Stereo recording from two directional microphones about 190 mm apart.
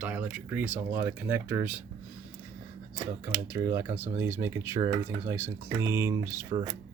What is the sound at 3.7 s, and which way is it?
Speech, 10° right (ahead or behind).